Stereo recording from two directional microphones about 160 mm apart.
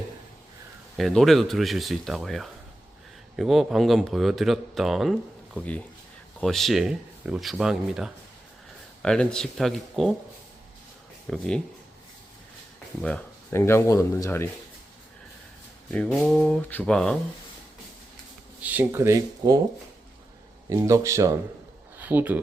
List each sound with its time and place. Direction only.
0.9 s speech: centre (ahead or behind)
11.3 s speech: 5° left (ahead or behind)
13.0 s speech: 5° left (ahead or behind)
13.6 s speech: 15° left (ahead or behind)
15.9 s speech: centre (ahead or behind)
18.6 s speech: 10° right (ahead or behind)
20.7 s speech: 20° right (ahead or behind)